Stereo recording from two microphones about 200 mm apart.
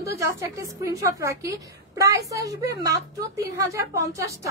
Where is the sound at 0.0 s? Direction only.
15° right (ahead or behind).